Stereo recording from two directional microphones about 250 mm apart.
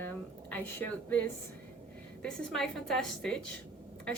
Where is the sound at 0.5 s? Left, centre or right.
Centre.